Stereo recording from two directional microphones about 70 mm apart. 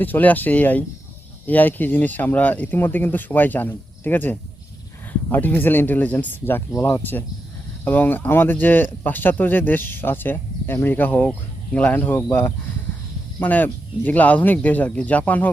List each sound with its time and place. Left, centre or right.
0.0 s speech: left